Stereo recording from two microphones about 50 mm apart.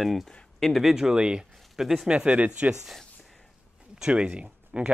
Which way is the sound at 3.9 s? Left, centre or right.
Centre.